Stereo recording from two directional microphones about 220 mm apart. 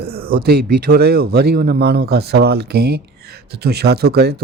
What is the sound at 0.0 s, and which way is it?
Speech, 45° right (ahead or behind).